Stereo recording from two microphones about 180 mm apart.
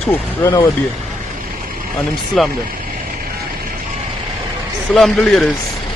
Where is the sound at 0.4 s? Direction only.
20° left (ahead or behind).